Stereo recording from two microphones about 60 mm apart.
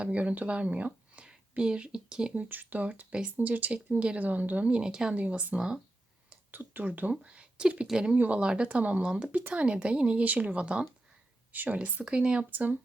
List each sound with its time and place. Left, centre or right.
0.0 s speech: right
2.3 s speech: right
5.1 s speech: right
6.5 s speech: right
11.5 s speech: right
12.5 s speech: right